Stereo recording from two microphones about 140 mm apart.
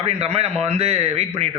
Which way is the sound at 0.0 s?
50° right (ahead or behind).